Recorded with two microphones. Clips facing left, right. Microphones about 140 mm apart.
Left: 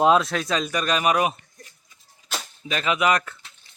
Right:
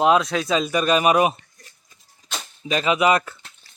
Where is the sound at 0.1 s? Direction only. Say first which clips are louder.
Right 1 dB; centre (ahead or behind).